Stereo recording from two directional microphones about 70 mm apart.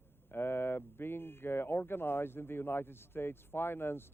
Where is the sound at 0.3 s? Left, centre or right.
Left.